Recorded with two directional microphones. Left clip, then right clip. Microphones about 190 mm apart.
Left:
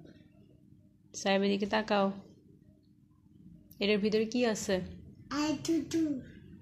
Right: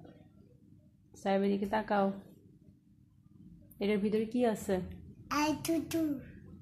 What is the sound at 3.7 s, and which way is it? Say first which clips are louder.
A woman's voice: left 3 dB; centre (ahead or behind).